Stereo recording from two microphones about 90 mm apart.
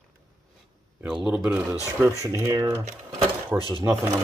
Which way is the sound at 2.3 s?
40° right (ahead or behind).